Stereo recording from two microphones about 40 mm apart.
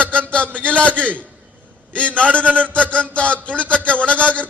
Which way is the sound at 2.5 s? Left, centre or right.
Right.